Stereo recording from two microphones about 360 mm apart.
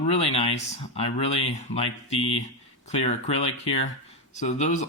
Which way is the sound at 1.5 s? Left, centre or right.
Centre.